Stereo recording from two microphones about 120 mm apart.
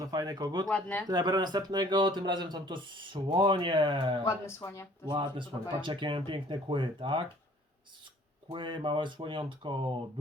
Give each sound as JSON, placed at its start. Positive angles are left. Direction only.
{"t": 0.0, "sound": "speech", "side_deg": -30}
{"t": 0.7, "sound": "speech", "side_deg": 15}
{"t": 1.0, "sound": "speech", "side_deg": -35}
{"t": 4.2, "sound": "speech", "side_deg": 25}
{"t": 5.1, "sound": "speech", "side_deg": -40}
{"t": 8.4, "sound": "speech", "side_deg": -45}